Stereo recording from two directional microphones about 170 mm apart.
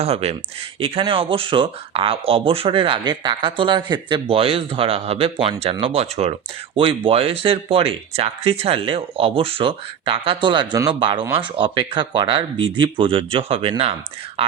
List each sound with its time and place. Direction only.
0.0 s speech: 40° right (ahead or behind)